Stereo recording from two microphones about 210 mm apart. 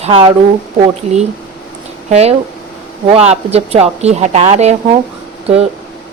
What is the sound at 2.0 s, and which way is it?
A woman's voice, 30° right (ahead or behind).